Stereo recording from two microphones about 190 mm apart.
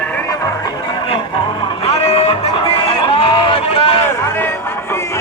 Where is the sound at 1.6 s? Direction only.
25° left (ahead or behind).